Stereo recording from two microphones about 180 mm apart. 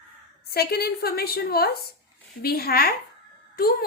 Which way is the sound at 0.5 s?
60° left (ahead or behind).